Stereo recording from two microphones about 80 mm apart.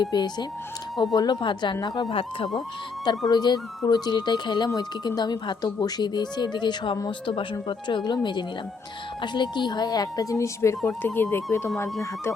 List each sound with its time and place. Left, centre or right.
0.0 s speech: left
7.7 s speech: left
10.3 s speech: left
10.8 s speech: left